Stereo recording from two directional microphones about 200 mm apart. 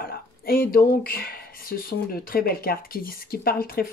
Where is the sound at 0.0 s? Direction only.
45° left (ahead or behind).